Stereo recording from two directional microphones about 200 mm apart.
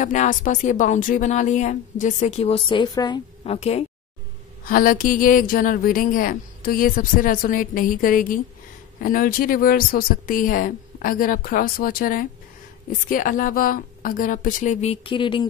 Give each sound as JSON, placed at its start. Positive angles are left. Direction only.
{"t": 0.0, "sound": "a woman's voice", "side_deg": 40}
{"t": 3.5, "sound": "a woman's voice", "side_deg": 30}
{"t": 4.6, "sound": "speech", "side_deg": 45}